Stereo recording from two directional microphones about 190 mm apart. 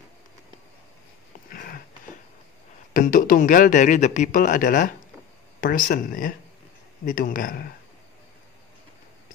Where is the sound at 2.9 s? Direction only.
45° left (ahead or behind).